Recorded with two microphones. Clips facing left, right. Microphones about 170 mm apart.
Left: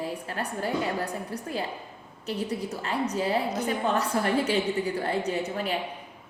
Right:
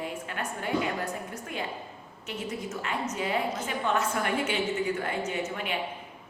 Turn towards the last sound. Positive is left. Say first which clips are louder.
# left 3 dB
turn(degrees=35)  # may be behind; listen again after turning